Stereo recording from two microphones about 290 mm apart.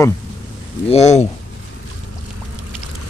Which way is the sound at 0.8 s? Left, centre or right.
Left.